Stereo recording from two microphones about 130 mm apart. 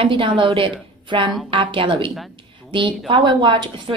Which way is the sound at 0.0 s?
40° right (ahead or behind).